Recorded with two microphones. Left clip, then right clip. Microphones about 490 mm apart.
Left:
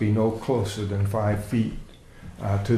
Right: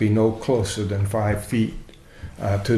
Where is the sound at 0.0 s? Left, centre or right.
Right.